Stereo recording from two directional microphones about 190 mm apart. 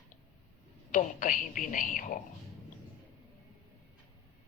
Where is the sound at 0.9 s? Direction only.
45° left (ahead or behind).